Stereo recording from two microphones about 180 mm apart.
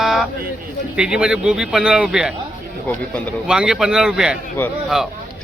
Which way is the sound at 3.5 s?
5° right (ahead or behind).